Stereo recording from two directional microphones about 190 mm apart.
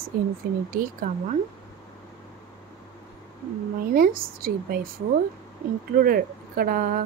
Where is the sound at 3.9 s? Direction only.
50° right (ahead or behind).